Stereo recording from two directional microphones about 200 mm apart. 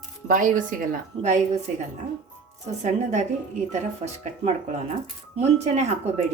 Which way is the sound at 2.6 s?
35° right (ahead or behind).